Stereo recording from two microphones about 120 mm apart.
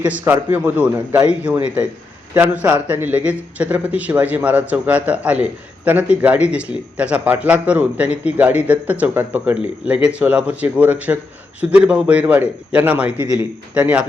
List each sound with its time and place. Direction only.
0.0 s a man's voice: 15° right (ahead or behind)